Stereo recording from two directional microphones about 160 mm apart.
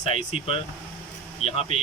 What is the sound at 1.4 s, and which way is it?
Speech, 40° left (ahead or behind).